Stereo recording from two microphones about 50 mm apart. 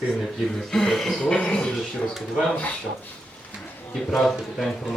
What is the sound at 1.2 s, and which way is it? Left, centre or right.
Speech, left.